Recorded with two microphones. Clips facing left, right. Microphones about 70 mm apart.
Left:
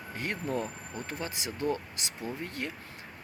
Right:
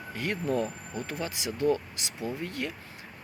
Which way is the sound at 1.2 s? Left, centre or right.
Left.